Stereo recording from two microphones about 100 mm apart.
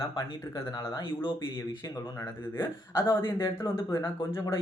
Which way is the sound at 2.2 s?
25° left (ahead or behind).